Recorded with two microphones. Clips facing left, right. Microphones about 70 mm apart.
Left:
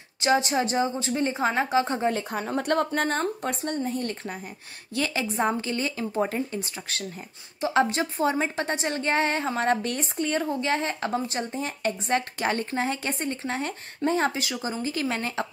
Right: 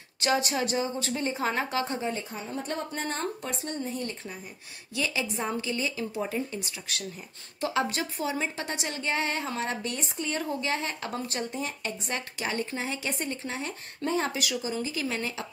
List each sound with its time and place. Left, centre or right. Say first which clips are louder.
0.2 s speech: left 4 dB; left
2.0 s a woman's voice: left 7 dB; left